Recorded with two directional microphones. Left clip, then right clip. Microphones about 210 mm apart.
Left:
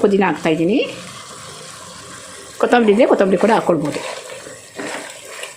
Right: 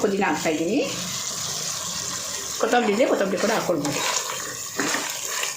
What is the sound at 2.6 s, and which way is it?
Speech, 40° left (ahead or behind).